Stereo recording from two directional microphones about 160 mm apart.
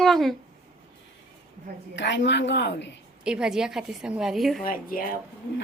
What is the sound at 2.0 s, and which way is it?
Speech, 90° left.